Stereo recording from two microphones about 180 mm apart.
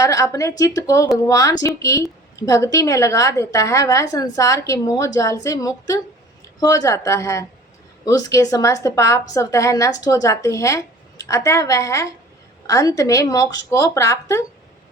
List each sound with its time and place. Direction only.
0.0 s a woman's voice: 20° left (ahead or behind)